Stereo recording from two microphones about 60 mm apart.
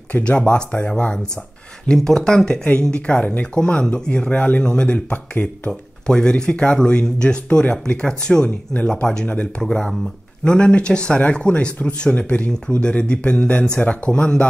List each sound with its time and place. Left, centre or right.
0.1 s speech: left
6.0 s speech: centre
8.7 s speech: left
9.0 s speech: centre